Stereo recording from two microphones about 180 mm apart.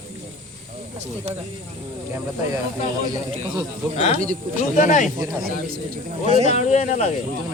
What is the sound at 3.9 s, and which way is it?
Speech, 35° left (ahead or behind).